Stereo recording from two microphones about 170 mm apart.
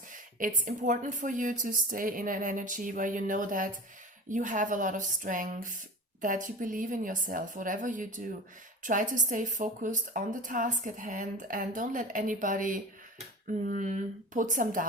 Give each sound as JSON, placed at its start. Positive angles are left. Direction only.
{"t": 0.1, "sound": "speech", "side_deg": -50}